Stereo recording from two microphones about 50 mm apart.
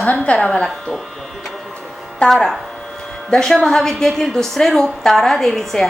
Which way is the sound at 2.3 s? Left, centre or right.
Centre.